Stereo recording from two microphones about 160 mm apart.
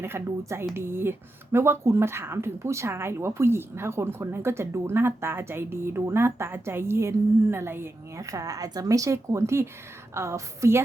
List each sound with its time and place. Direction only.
0.0 s speech: 15° right (ahead or behind)